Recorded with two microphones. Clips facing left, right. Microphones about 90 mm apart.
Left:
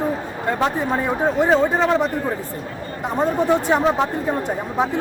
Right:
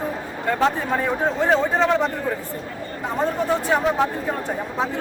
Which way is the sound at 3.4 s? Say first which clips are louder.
Left 4 dB; 20° left (ahead or behind).